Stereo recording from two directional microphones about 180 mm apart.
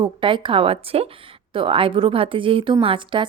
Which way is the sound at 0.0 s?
25° right (ahead or behind).